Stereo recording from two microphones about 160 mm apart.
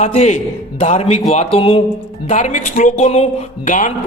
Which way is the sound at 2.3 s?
50° left (ahead or behind).